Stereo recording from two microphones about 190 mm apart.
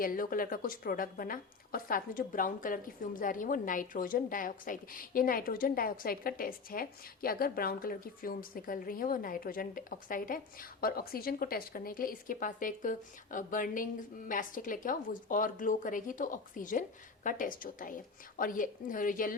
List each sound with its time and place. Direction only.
0.0 s a woman's voice: 50° left (ahead or behind)